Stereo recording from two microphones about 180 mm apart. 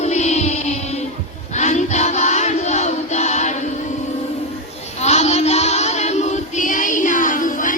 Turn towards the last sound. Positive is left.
turn(degrees=45)  # may be behind; listen again after turning